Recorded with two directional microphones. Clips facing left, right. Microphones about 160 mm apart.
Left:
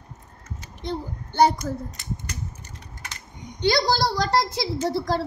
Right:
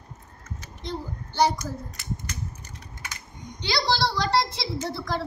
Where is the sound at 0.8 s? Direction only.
55° left (ahead or behind).